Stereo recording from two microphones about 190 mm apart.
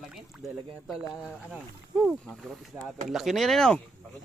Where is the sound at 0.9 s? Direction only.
5° right (ahead or behind).